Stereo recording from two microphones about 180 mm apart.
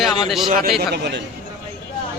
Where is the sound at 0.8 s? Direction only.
65° right (ahead or behind).